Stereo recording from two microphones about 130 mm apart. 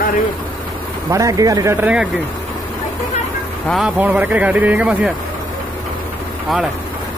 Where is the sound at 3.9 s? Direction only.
15° right (ahead or behind).